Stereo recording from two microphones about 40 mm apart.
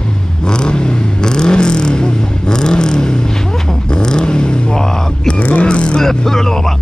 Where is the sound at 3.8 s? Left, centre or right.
Left.